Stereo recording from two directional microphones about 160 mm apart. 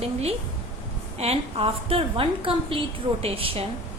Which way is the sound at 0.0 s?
40° right (ahead or behind).